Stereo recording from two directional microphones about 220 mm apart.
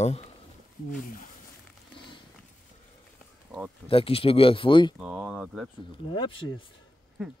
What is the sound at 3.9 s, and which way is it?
Speech, 25° left (ahead or behind).